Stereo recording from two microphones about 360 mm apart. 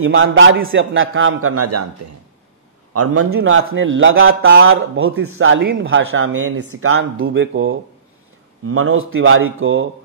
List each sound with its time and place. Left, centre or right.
0.0 s a man's voice: right
2.9 s a man's voice: right